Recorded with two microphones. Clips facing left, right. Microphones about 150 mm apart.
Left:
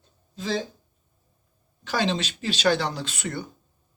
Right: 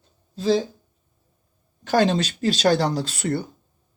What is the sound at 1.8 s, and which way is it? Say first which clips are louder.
A man's voice: right 6 dB; 45° right (ahead or behind).